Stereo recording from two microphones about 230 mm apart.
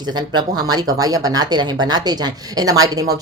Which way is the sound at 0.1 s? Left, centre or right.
Centre.